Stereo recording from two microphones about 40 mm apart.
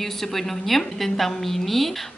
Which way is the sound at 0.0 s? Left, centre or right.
Centre.